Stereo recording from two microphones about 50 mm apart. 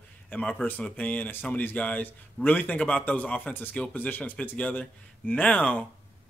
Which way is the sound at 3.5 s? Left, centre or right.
Left.